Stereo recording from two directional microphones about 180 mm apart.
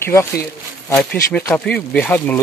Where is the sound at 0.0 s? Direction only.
15° left (ahead or behind).